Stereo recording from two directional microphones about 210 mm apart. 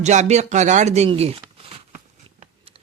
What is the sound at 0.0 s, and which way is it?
Speech, 35° right (ahead or behind).